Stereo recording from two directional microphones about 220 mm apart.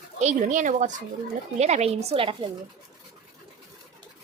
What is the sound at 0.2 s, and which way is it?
A woman's voice, 30° right (ahead or behind).